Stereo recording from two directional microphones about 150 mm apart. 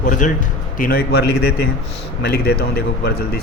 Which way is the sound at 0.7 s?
80° left.